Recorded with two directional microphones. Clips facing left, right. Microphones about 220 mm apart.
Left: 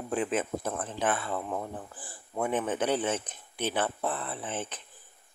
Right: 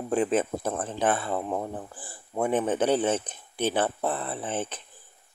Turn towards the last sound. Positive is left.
turn(degrees=-30)  # may be behind; listen again after turning